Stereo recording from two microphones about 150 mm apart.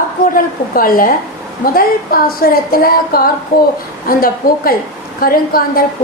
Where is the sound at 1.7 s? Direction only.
80° left.